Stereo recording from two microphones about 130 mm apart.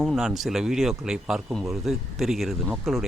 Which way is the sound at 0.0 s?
Centre (ahead or behind).